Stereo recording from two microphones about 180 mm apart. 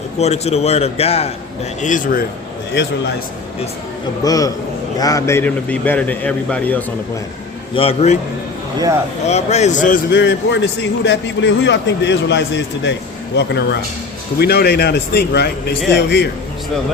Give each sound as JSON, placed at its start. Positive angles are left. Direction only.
{"t": 0.2, "sound": "a man's voice", "side_deg": 35}
{"t": 1.8, "sound": "a man's voice", "side_deg": 45}
{"t": 4.2, "sound": "a man's voice", "side_deg": 20}
{"t": 7.8, "sound": "a man's voice", "side_deg": 35}
{"t": 9.2, "sound": "a man's voice", "side_deg": 40}
{"t": 10.1, "sound": "a man's voice", "side_deg": 75}
{"t": 14.3, "sound": "a man's voice", "side_deg": 60}